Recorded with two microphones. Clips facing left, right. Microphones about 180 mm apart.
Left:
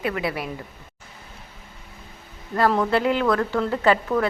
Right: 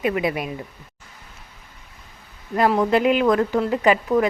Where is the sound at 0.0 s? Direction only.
20° right (ahead or behind).